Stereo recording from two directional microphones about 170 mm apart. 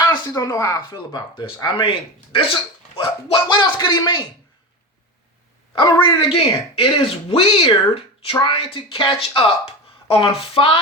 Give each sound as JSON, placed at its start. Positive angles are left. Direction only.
{"t": 0.0, "sound": "speech", "side_deg": 25}
{"t": 5.8, "sound": "speech", "side_deg": 25}